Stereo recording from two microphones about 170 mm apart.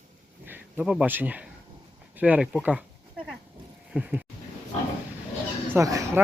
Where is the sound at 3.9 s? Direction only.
5° right (ahead or behind).